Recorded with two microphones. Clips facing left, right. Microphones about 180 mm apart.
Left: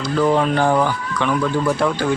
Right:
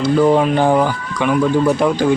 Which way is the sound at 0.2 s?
15° right (ahead or behind).